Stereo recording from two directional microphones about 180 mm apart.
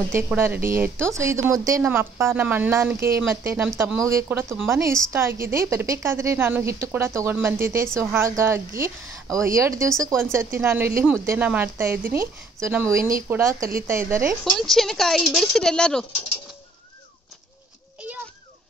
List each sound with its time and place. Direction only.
0.4 s speech: 15° right (ahead or behind)
14.4 s speech: centre (ahead or behind)